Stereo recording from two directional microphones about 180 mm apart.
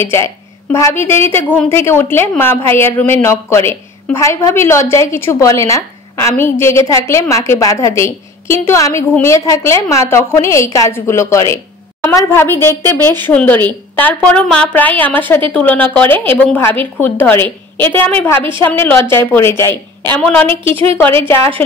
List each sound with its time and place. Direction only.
0.0 s a woman's voice: 15° left (ahead or behind)
20.4 s a woman's voice: 30° right (ahead or behind)
21.3 s a woman's voice: 10° left (ahead or behind)